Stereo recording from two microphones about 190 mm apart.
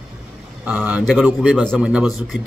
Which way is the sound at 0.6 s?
10° right (ahead or behind).